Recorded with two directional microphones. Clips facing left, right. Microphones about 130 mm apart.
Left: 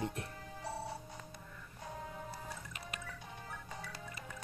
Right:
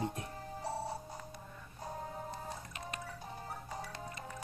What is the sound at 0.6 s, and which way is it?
Music, 35° right (ahead or behind).